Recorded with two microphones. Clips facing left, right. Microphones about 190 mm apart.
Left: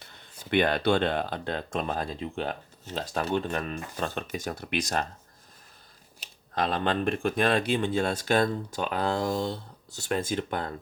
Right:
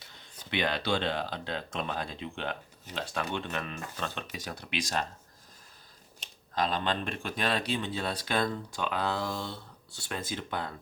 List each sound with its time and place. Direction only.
0.5 s speech: 50° left (ahead or behind)
6.5 s speech: 55° left (ahead or behind)